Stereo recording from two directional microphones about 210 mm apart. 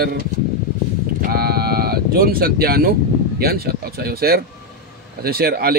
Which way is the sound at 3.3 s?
45° right (ahead or behind).